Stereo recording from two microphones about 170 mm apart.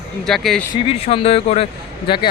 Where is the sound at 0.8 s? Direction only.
35° left (ahead or behind).